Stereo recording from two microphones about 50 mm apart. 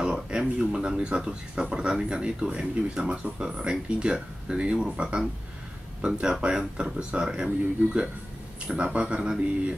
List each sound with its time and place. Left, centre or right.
0.0 s speech: centre